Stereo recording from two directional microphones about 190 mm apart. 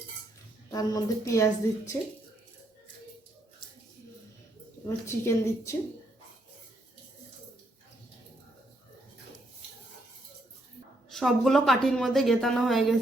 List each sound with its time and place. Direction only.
0.7 s a woman's voice: 20° left (ahead or behind)
4.9 s a woman's voice: 15° left (ahead or behind)
11.1 s a woman's voice: centre (ahead or behind)